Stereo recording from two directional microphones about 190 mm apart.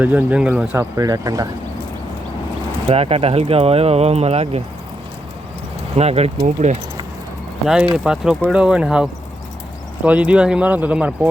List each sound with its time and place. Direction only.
0.0 s speech: 10° right (ahead or behind)
2.9 s speech: 30° right (ahead or behind)
6.0 s speech: 35° right (ahead or behind)
7.9 s speech: 5° right (ahead or behind)